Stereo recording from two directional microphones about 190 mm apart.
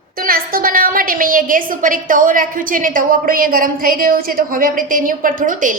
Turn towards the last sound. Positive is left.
turn(degrees=-45)  # may be behind; listen again after turning